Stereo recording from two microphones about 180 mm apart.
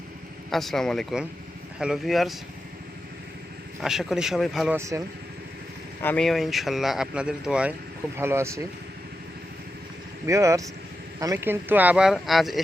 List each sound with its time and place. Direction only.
0.5 s speech: centre (ahead or behind)
3.8 s speech: centre (ahead or behind)
4.8 s speech: 15° right (ahead or behind)
6.0 s speech: 5° left (ahead or behind); by 8.6 s 15° right (ahead or behind)
10.2 s speech: 15° right (ahead or behind); by 12.6 s centre (ahead or behind)